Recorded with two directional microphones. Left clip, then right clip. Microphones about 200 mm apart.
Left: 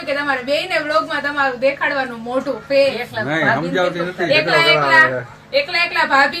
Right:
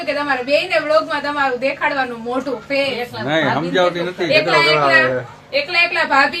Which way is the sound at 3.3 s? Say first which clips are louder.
Even; centre (ahead or behind).